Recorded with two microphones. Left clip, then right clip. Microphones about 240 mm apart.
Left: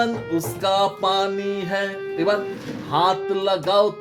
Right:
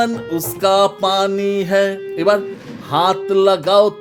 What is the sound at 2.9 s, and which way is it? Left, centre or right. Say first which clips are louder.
Music: right 4 dB; right.